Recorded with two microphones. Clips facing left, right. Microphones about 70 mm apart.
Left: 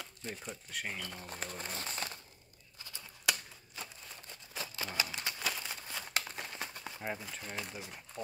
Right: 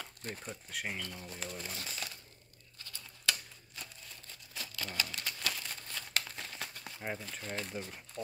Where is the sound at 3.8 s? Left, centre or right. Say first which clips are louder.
Left 3 dB; left.